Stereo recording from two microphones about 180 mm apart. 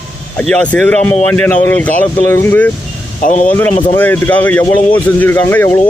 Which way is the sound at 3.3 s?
40° left (ahead or behind).